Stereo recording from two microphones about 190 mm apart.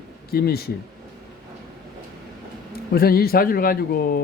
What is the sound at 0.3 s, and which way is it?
Speech, 55° left (ahead or behind).